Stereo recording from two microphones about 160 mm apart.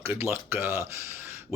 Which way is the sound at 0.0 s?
15° right (ahead or behind).